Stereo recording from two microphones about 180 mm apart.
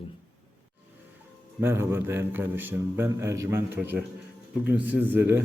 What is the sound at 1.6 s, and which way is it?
A man's voice, 15° right (ahead or behind).